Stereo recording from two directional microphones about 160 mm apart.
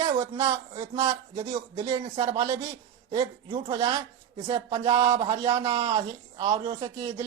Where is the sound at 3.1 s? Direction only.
25° right (ahead or behind).